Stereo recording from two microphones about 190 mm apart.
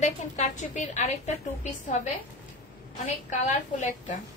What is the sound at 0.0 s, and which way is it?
A woman's voice, 40° left (ahead or behind).